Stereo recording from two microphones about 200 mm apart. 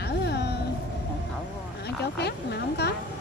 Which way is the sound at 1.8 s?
55° left (ahead or behind).